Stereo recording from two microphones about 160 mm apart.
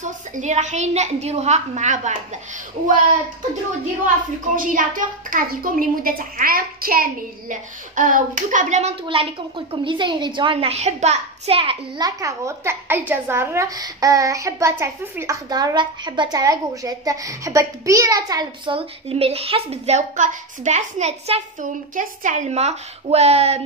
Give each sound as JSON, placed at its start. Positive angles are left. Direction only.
{"t": 0.0, "sound": "a woman's voice", "side_deg": -50}
{"t": 4.6, "sound": "a woman's voice", "side_deg": -55}
{"t": 9.0, "sound": "a child's voice", "side_deg": -35}
{"t": 12.0, "sound": "a woman's voice", "side_deg": -20}